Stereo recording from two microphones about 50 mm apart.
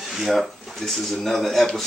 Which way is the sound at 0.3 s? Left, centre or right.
Centre.